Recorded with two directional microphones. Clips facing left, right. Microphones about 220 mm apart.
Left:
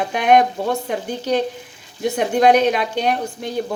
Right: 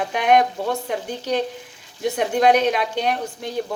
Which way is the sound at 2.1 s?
Centre (ahead or behind).